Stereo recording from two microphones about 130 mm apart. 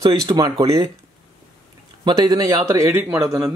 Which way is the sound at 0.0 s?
30° right (ahead or behind).